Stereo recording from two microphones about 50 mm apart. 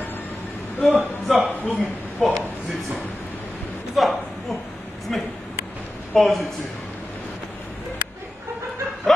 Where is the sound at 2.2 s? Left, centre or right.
Centre.